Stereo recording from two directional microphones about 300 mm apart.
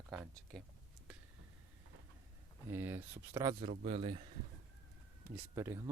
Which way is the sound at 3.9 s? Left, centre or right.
Centre.